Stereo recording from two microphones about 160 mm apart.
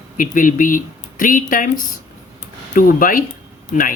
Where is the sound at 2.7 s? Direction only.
60° left (ahead or behind).